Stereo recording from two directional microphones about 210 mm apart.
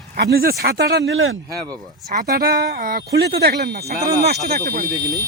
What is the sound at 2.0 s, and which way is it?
A man's voice, 45° right (ahead or behind).